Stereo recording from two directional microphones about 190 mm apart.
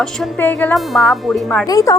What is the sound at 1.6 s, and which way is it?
Speech, 20° left (ahead or behind).